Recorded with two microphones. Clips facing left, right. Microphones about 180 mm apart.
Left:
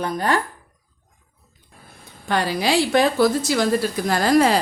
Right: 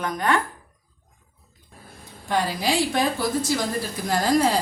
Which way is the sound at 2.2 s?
75° left (ahead or behind).